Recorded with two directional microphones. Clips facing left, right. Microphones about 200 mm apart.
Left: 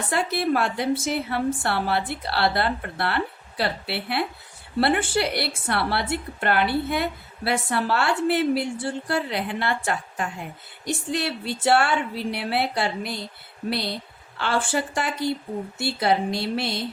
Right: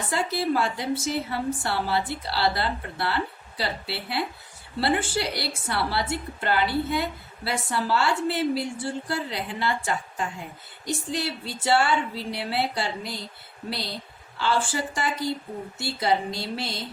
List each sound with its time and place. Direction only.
0.1 s a woman's voice: 60° left (ahead or behind)
14.3 s a woman's voice: 60° left (ahead or behind)